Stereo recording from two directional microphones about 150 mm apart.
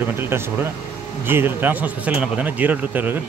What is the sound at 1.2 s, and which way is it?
Speech, 15° right (ahead or behind).